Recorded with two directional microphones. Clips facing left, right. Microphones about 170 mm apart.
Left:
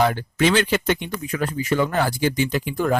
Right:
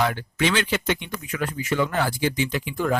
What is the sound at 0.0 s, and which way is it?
Speech, 35° left (ahead or behind).